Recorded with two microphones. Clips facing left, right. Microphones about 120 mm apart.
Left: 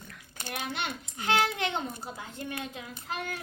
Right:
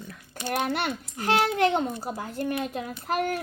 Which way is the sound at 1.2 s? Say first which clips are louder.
Right 5 dB; 45° right (ahead or behind).